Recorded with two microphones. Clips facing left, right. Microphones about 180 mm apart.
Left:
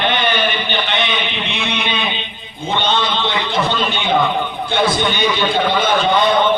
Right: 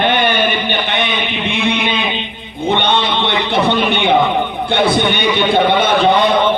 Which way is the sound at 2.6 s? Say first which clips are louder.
Right 3 dB; 60° right (ahead or behind).